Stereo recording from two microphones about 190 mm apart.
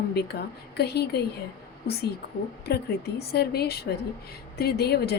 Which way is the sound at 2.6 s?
55° left (ahead or behind).